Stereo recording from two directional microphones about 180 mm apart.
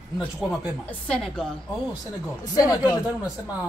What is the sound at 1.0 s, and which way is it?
Speech, 5° left (ahead or behind).